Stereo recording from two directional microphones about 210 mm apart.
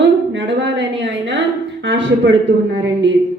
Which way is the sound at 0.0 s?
60° right (ahead or behind).